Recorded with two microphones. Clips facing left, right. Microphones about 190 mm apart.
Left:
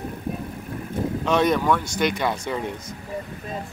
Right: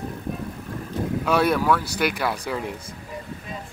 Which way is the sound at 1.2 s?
5° right (ahead or behind).